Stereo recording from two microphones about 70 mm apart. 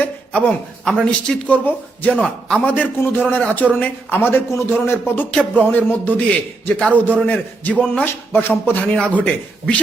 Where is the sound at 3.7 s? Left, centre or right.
Left.